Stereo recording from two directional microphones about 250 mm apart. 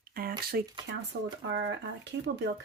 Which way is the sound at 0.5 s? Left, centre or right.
Right.